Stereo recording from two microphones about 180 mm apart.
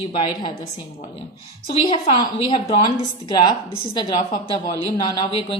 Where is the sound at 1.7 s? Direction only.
30° left (ahead or behind).